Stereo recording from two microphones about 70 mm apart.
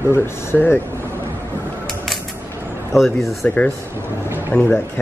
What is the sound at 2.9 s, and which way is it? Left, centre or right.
Speech, centre.